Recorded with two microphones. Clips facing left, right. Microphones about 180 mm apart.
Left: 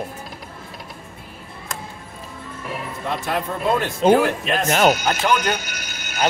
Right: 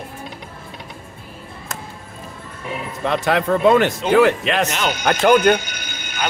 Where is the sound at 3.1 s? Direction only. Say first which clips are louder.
Right 7 dB; 90° right.